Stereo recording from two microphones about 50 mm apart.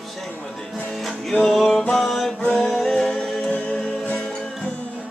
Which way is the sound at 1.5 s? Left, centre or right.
Centre.